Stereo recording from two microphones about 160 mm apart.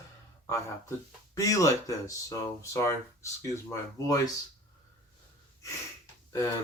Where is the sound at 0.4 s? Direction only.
20° left (ahead or behind).